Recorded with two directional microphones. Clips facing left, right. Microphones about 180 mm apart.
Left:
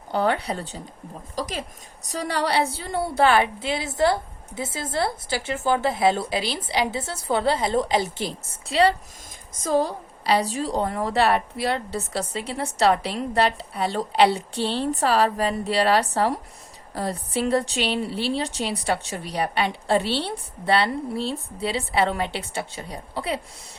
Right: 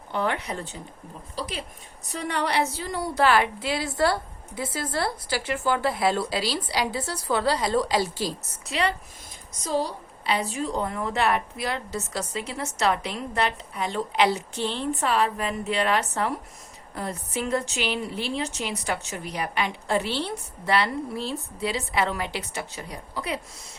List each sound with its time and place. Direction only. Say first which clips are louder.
0.1 s speech: left 4 dB; 35° left (ahead or behind)
9.6 s speech: left 4 dB; 50° left (ahead or behind); by 23.4 s 30° left (ahead or behind)